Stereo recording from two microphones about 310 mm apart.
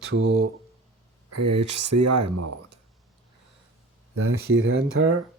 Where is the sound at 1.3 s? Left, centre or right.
Right.